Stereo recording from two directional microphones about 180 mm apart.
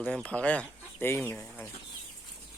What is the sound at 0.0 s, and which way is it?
Speech, 5° left (ahead or behind).